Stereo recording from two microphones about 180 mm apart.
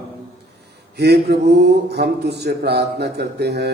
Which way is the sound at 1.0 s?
65° right (ahead or behind).